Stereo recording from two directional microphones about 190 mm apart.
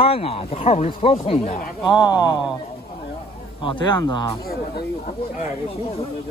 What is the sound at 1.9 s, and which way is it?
Speech, 20° left (ahead or behind).